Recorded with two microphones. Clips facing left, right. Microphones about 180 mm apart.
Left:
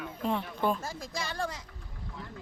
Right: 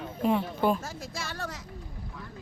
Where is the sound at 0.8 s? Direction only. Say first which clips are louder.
Even; 10° left (ahead or behind).